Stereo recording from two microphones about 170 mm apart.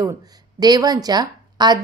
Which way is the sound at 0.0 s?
20° right (ahead or behind).